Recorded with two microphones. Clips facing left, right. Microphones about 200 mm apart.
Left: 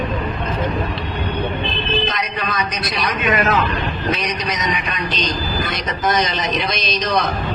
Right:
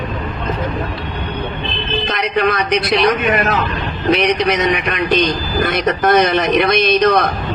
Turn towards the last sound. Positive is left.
turn(degrees=-60)  # may be behind; listen again after turning